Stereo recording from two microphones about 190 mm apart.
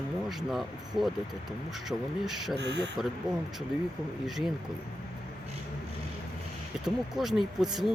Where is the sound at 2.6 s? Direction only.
65° right (ahead or behind).